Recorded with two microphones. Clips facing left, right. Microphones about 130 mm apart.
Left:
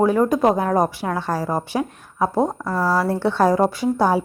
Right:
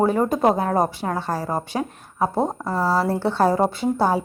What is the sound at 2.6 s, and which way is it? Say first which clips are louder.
Speech: left 1 dB; 25° right (ahead or behind).